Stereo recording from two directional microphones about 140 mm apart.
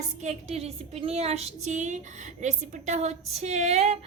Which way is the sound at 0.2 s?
55° right (ahead or behind).